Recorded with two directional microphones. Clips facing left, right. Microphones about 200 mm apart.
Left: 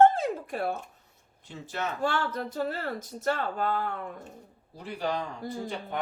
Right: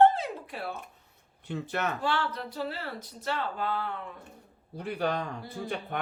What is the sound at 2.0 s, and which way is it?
Speech, 45° left (ahead or behind).